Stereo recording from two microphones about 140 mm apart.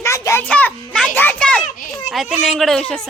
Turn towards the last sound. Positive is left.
turn(degrees=5)  # may be behind; listen again after turning